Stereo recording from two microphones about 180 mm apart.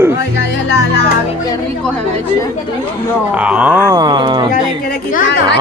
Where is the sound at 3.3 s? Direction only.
5° right (ahead or behind); by 4.5 s 25° right (ahead or behind).